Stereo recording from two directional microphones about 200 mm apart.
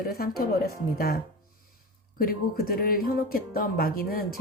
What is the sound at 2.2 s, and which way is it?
Speech, 45° left (ahead or behind).